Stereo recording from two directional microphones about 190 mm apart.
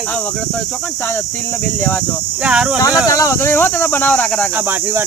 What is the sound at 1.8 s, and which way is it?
Speech, 10° left (ahead or behind).